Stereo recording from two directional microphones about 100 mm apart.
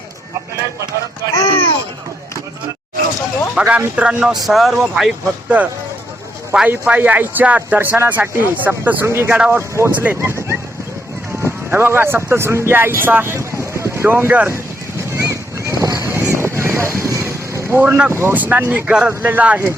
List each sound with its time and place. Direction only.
3.5 s speech: 15° right (ahead or behind)
9.3 s speech: 10° right (ahead or behind)
9.6 s speech: 25° right (ahead or behind)
15.1 s boat: 30° right (ahead or behind)
18.1 s speech: 25° right (ahead or behind)